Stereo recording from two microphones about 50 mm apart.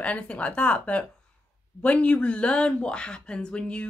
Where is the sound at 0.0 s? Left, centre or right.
Left.